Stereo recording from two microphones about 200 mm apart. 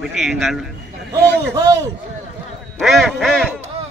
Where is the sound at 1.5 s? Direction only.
15° right (ahead or behind).